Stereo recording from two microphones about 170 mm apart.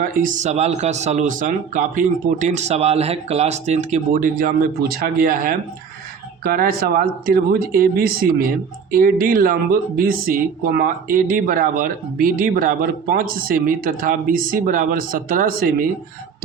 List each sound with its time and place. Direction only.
0.0 s speech: 50° right (ahead or behind)